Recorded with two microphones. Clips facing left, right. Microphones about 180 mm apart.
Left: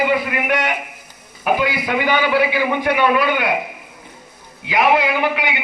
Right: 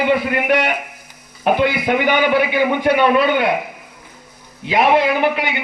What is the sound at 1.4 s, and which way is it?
A man's voice, 25° right (ahead or behind).